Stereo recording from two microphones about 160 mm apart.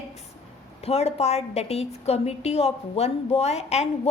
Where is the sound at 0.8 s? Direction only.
40° left (ahead or behind).